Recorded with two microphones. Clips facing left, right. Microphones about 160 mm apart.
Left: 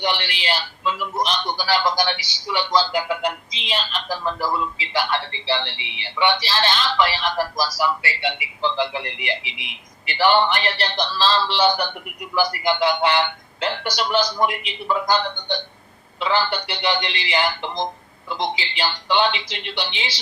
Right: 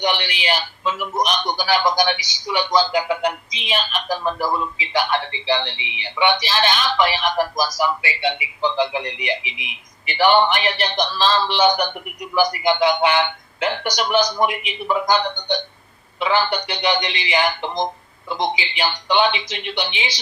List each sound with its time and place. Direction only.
0.0 s a man's voice: 15° right (ahead or behind)